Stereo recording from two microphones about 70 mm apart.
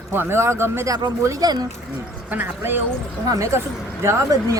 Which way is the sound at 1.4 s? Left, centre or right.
Right.